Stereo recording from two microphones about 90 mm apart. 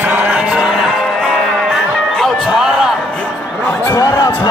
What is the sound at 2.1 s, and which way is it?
Music, centre (ahead or behind).